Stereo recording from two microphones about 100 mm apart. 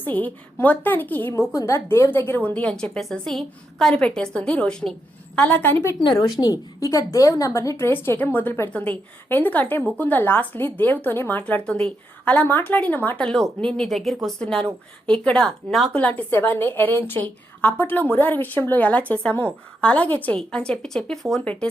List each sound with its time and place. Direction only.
0.0 s a woman's voice: 20° left (ahead or behind)
1.3 s a woman's voice: 30° left (ahead or behind)
6.4 s a woman's voice: 35° left (ahead or behind); by 16.0 s 5° left (ahead or behind)
16.0 s a woman's voice: 15° left (ahead or behind)